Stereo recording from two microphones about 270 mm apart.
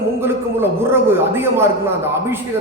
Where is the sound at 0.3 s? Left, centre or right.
Centre.